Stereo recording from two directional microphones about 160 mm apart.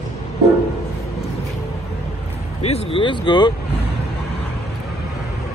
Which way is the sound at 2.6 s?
35° left (ahead or behind).